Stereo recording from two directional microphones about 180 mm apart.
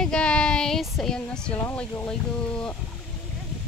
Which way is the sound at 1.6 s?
10° left (ahead or behind).